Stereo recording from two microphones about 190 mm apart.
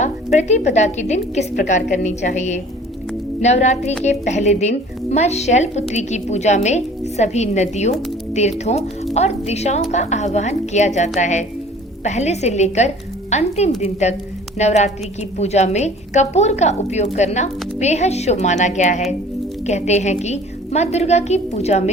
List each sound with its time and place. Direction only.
0.0 s a woman's voice: 35° left (ahead or behind)